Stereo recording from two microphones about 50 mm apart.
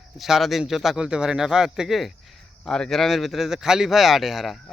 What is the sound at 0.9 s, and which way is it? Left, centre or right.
Speech, centre.